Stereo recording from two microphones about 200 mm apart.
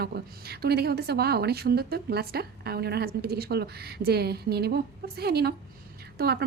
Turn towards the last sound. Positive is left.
turn(degrees=-55)  # may be behind; listen again after turning